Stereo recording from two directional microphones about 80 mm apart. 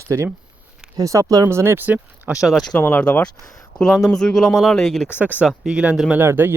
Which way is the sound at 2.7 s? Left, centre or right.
Left.